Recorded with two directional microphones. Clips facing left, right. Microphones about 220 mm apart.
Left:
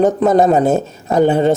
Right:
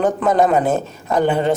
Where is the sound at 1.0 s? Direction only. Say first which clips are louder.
Left 4 dB; 25° left (ahead or behind).